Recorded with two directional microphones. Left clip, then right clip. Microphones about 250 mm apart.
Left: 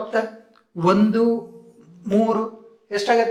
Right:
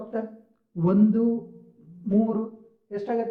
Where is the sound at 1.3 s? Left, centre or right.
Centre.